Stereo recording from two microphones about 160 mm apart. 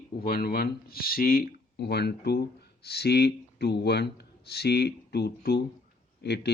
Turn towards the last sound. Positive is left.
turn(degrees=90)